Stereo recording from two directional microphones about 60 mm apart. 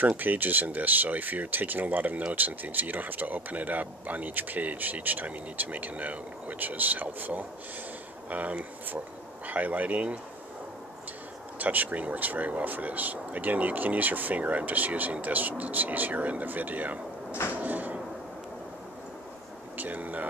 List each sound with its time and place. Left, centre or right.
0.2 s speech: right
11.5 s speech: right
17.5 s a sound: right
19.8 s speech: right